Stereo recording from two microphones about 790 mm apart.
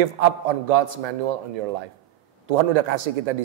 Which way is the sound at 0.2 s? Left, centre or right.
Right.